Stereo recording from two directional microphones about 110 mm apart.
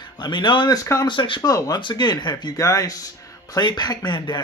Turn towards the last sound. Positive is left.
turn(degrees=40)  # may be behind; listen again after turning